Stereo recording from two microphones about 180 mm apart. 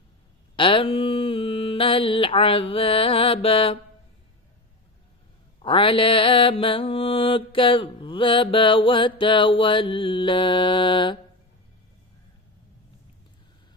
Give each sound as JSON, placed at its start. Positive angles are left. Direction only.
{"t": 0.5, "sound": "mantra", "side_deg": 30}
{"t": 5.6, "sound": "mantra", "side_deg": 30}